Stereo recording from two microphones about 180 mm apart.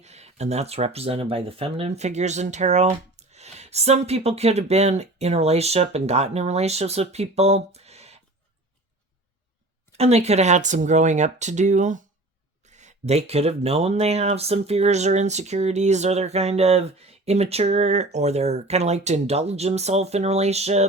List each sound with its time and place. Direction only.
0.0 s speech: 35° right (ahead or behind)
9.9 s speech: 35° right (ahead or behind)